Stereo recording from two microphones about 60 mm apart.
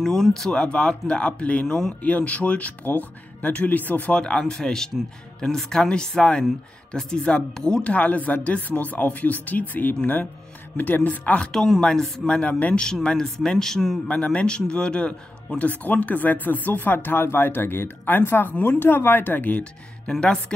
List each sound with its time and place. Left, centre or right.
0.0 s speech: centre; by 4.1 s left
4.1 s speech: centre
11.1 s speech: left
11.8 s speech: centre
12.8 s speech: centre
14.0 s a man's voice: centre
20.1 s speech: centre